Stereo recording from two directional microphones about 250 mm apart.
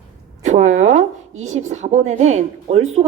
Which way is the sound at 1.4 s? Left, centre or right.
Right.